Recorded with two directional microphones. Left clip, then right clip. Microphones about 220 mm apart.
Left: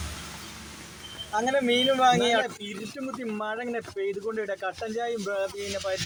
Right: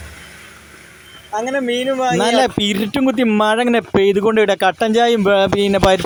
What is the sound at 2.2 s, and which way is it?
Speech, 45° right (ahead or behind).